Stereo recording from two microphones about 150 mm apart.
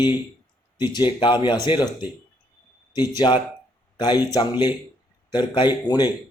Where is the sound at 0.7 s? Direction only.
30° left (ahead or behind).